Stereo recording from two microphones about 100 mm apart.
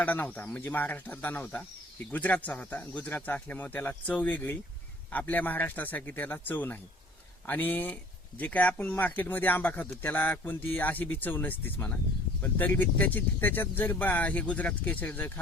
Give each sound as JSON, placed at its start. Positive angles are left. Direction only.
{"t": 0.0, "sound": "speech", "side_deg": 15}